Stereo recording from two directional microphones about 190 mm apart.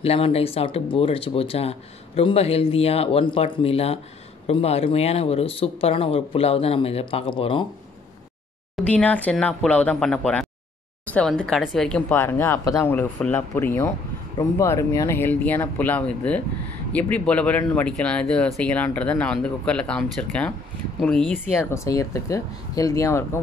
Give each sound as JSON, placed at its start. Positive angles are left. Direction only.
{"t": 0.0, "sound": "speech", "side_deg": 30}
{"t": 8.7, "sound": "speech", "side_deg": 5}
{"t": 21.5, "sound": "speech", "side_deg": 15}